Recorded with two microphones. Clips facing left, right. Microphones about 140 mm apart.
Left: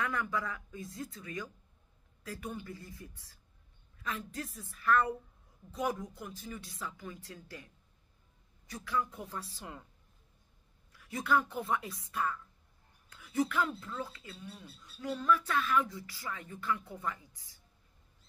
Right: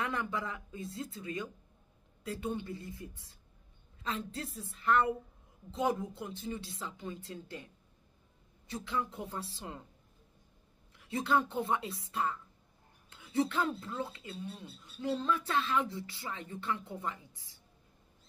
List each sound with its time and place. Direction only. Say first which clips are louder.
0.0 s speech: left 1 dB; 25° right (ahead or behind)
10.9 s speech: right 1 dB; 25° right (ahead or behind)